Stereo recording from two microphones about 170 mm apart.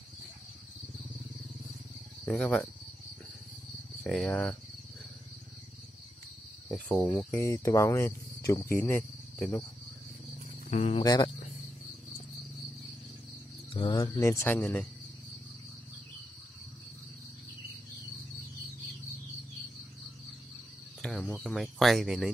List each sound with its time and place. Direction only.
2.2 s speech: 5° left (ahead or behind)
4.0 s speech: 5° left (ahead or behind)
7.1 s speech: 15° left (ahead or behind)
10.7 s speech: 35° left (ahead or behind)
11.0 s speech: 25° left (ahead or behind)
13.7 s speech: 30° left (ahead or behind)
14.0 s speech: 20° left (ahead or behind)
21.0 s cricket: 5° left (ahead or behind)
21.5 s speech: centre (ahead or behind)